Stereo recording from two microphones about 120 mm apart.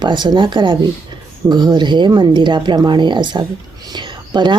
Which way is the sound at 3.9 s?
40° right (ahead or behind).